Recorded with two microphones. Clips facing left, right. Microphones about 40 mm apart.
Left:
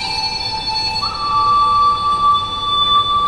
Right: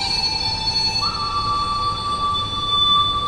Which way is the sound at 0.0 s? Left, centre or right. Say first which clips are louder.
Left 2 dB; centre.